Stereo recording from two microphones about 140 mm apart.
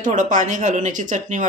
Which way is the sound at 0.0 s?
65° right (ahead or behind).